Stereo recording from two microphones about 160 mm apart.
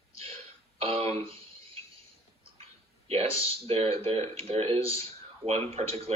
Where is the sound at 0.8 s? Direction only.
40° right (ahead or behind).